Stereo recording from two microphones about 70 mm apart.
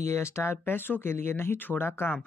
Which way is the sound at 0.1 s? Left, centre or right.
Left.